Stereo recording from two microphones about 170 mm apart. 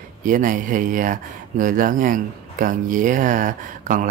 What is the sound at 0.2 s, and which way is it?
Speech, 50° right (ahead or behind).